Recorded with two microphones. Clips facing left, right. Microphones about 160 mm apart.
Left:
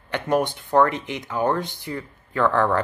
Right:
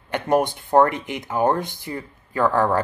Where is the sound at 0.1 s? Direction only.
45° right (ahead or behind).